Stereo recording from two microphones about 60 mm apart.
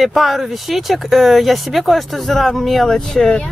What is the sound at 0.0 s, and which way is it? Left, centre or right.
Speech, centre.